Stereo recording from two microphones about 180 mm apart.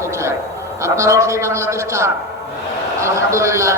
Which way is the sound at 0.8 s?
15° right (ahead or behind).